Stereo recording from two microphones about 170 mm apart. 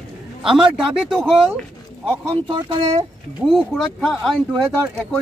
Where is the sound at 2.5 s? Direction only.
30° right (ahead or behind).